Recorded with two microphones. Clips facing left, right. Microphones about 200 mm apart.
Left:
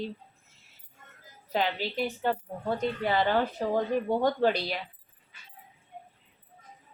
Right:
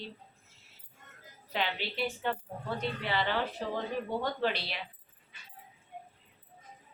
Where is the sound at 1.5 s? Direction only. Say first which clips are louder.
Left 5 dB; 40° left (ahead or behind).